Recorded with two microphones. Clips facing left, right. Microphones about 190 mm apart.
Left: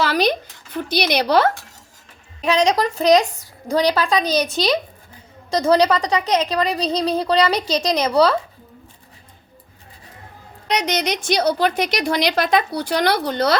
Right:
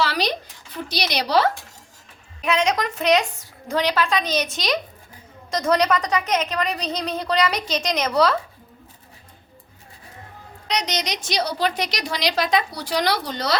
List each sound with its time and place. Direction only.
0.0 s a sound: 50° left (ahead or behind)
0.9 s a woman's voice: 55° left (ahead or behind)
2.4 s a woman's voice: 35° left (ahead or behind)
10.7 s a woman's voice: 55° left (ahead or behind)